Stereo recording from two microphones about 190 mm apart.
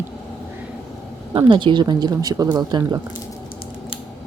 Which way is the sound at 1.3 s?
25° right (ahead or behind).